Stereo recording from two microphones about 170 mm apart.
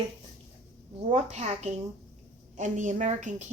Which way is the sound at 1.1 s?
40° right (ahead or behind).